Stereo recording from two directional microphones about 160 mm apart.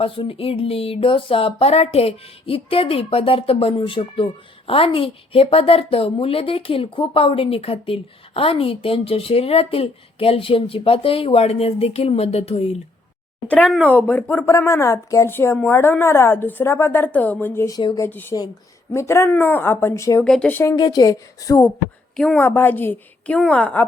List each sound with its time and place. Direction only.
0.0 s speech: 35° left (ahead or behind)
13.5 s speech: 10° left (ahead or behind)
20.2 s speech: 5° left (ahead or behind)
20.7 s speech: 25° left (ahead or behind)
22.1 s speech: 5° left (ahead or behind)
22.4 s speech: 15° left (ahead or behind)